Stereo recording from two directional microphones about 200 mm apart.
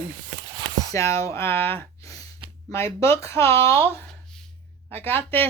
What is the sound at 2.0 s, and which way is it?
Gasp, 15° left (ahead or behind).